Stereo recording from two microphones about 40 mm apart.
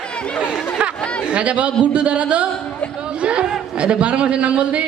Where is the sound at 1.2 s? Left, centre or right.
Right.